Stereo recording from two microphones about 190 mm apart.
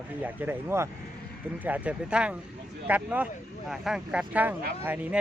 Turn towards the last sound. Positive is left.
turn(degrees=-10)  # may be behind; listen again after turning